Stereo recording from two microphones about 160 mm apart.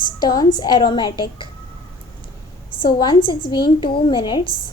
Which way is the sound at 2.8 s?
30° left (ahead or behind).